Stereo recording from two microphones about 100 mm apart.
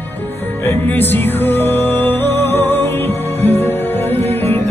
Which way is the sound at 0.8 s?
20° left (ahead or behind).